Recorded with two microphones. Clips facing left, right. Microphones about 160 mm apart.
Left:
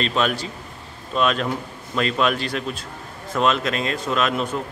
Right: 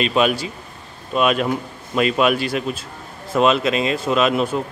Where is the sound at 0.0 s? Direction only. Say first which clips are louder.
Right 4 dB; 15° right (ahead or behind).